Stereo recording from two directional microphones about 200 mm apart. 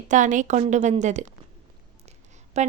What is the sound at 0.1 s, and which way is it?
A woman's voice, 40° right (ahead or behind).